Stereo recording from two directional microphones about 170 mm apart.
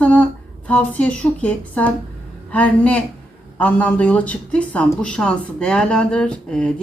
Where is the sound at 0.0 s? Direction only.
10° left (ahead or behind).